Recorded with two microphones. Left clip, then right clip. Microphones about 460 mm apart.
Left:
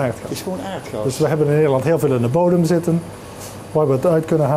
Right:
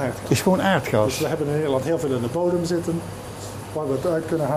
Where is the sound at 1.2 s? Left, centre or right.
Left.